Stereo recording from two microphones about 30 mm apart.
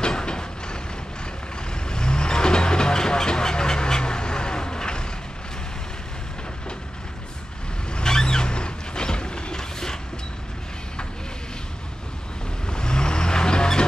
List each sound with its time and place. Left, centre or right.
0.0 s vehicle: left
7.9 s vehicle: left
12.6 s vehicle: left